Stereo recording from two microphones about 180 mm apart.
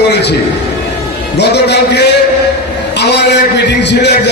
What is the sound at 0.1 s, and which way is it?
Speech, 70° left (ahead or behind).